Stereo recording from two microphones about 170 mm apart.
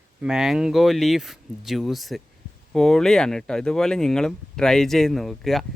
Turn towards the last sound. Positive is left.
turn(degrees=0)  # may be behind; listen again after turning